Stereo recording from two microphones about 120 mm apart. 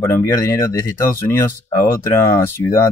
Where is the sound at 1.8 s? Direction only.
25° left (ahead or behind).